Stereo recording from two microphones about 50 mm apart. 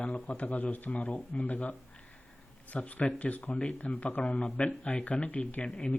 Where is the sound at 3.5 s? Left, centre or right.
Centre.